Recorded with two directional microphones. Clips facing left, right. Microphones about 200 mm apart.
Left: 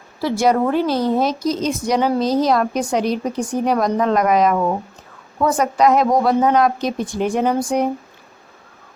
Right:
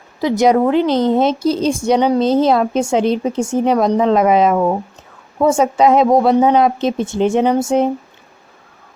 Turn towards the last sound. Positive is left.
turn(degrees=-25)  # may be behind; listen again after turning